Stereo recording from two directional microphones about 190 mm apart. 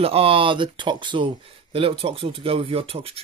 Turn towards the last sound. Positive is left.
turn(degrees=-30)  # may be behind; listen again after turning